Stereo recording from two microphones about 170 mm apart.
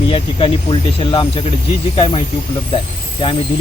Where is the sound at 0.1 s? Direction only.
30° left (ahead or behind).